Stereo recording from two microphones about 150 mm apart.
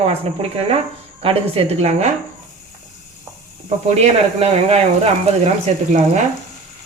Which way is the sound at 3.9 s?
40° right (ahead or behind).